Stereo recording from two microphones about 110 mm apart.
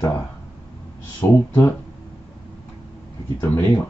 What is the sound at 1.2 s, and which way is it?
Speech, 15° left (ahead or behind).